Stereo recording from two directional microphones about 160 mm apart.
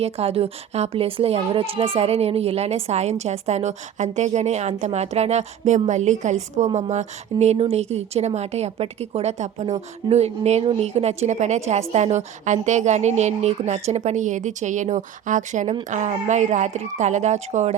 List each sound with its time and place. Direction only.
0.0 s a woman's voice: 40° right (ahead or behind)